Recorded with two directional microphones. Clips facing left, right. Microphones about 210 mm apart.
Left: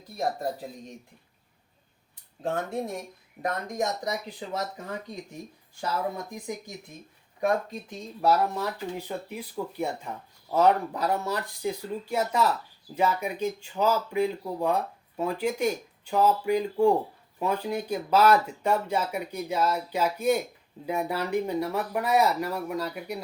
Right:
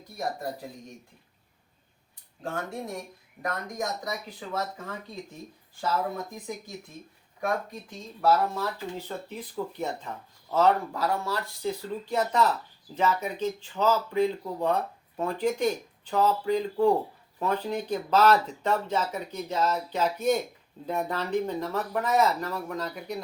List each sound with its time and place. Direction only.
2.4 s speech: 20° left (ahead or behind)
7.4 s speech: 20° left (ahead or behind)